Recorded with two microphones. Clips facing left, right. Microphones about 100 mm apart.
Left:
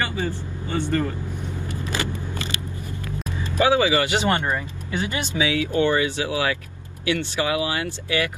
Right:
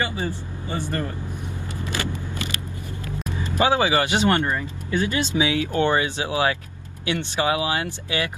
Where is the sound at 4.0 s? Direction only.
20° right (ahead or behind).